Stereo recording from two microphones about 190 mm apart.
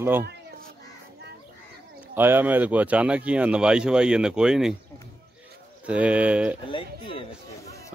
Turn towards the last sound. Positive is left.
turn(degrees=25)  # may be behind; listen again after turning